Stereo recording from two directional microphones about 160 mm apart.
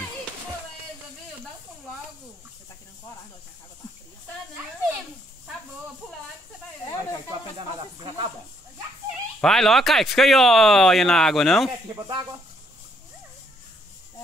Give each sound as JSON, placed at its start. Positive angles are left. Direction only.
{"t": 7.2, "sound": "snake", "side_deg": -30}
{"t": 9.4, "sound": "speech", "side_deg": 0}
{"t": 11.9, "sound": "speech", "side_deg": -25}